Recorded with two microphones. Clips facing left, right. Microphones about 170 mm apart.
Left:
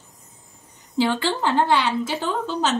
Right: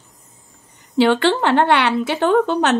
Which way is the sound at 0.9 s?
70° right (ahead or behind).